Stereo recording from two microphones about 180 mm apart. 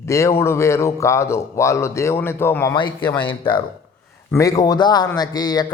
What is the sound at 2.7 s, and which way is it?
Speech, 25° left (ahead or behind).